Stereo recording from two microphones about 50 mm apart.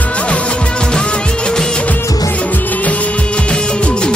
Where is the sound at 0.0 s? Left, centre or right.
Left.